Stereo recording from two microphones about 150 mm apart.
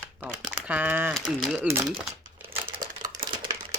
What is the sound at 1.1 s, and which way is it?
Speech, centre (ahead or behind).